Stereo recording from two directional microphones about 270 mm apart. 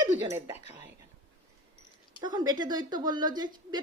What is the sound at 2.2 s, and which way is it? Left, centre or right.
Speech, centre.